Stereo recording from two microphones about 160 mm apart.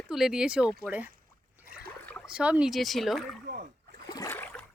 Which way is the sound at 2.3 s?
5° right (ahead or behind).